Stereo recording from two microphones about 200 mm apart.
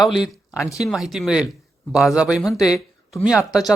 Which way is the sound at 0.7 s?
Centre (ahead or behind).